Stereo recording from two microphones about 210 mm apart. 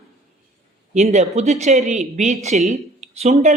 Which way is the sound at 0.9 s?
30° right (ahead or behind).